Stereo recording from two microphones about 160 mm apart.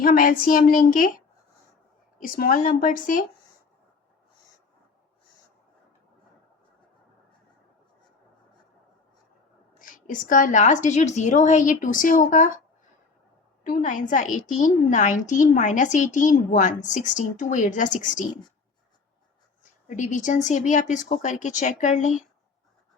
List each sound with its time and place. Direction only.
0.0 s a woman's voice: 60° left (ahead or behind)
9.7 s a woman's voice: 60° left (ahead or behind)
13.7 s a woman's voice: 55° left (ahead or behind)
19.9 s a woman's voice: 50° left (ahead or behind)